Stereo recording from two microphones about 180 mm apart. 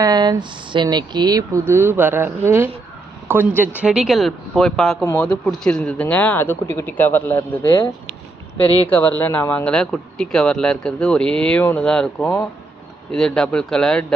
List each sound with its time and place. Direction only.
0.0 s a woman's voice: 20° right (ahead or behind); by 14.0 s 5° left (ahead or behind)